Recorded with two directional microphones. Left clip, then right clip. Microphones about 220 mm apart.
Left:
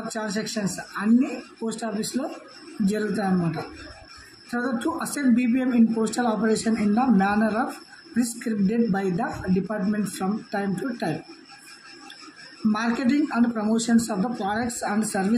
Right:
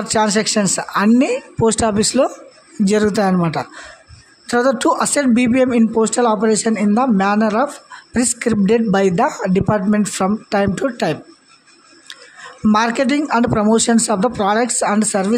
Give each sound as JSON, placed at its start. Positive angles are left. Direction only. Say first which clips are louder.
{"t": 0.1, "sound": "a man's voice", "louder": "right 16 dB", "side_deg": -50}
{"t": 12.7, "sound": "a man's voice", "louder": "right 9 dB", "side_deg": -45}